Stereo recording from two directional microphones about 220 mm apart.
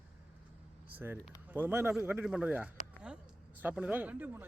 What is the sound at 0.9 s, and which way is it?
Speech, 5° right (ahead or behind).